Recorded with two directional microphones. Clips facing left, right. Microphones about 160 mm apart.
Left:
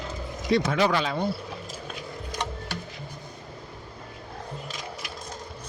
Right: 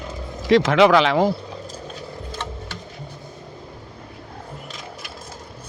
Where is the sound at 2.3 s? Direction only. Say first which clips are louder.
Left 2 dB; 15° left (ahead or behind).